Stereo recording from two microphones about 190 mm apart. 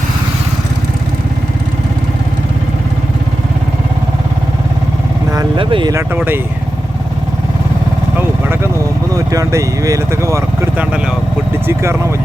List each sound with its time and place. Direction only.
5.3 s a sound: 20° right (ahead or behind)
6.1 s speech: 10° right (ahead or behind)
8.2 s vehicle: 10° right (ahead or behind)
9.1 s speech: 15° right (ahead or behind)